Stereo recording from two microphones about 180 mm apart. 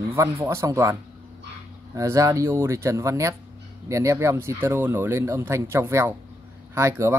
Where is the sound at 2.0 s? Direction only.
20° right (ahead or behind).